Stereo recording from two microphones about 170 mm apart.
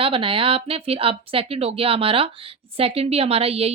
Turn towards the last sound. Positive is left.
turn(degrees=-35)  # may be behind; listen again after turning